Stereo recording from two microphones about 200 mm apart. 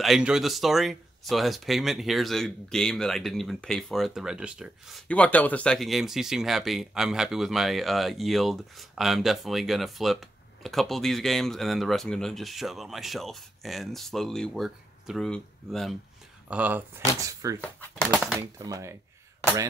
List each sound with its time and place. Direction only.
0.0 s speech: centre (ahead or behind)
17.6 s speech: 5° left (ahead or behind)
18.1 s speech: 5° right (ahead or behind)
18.6 s speech: 15° right (ahead or behind)